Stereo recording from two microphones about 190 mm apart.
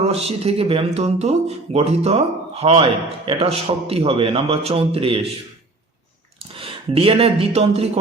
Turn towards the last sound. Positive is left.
turn(degrees=-30)  # may be behind; listen again after turning